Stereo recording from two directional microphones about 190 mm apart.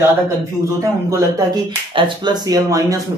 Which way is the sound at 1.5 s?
25° right (ahead or behind).